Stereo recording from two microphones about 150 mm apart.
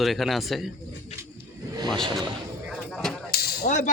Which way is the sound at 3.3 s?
90° left.